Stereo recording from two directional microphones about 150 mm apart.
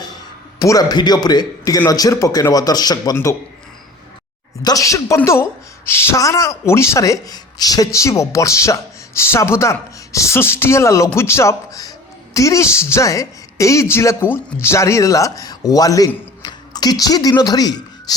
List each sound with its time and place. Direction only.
0.6 s a woman's voice: 25° left (ahead or behind)
4.6 s a woman's voice: 20° left (ahead or behind)